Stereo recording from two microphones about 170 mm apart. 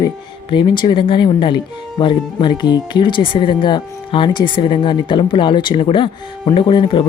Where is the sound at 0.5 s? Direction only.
30° left (ahead or behind).